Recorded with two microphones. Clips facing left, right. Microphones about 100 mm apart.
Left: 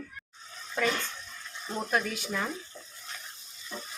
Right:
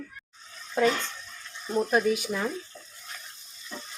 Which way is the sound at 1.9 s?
20° right (ahead or behind).